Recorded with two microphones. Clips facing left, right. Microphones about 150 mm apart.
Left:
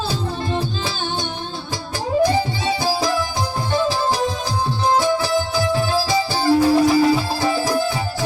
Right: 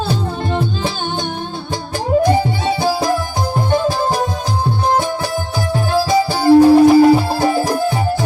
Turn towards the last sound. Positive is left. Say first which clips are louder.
# right 4 dB
turn(degrees=-50)  # may be behind; listen again after turning